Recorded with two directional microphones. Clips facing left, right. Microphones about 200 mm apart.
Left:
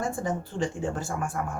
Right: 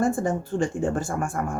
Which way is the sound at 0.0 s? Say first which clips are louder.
Right 6 dB; 50° right (ahead or behind).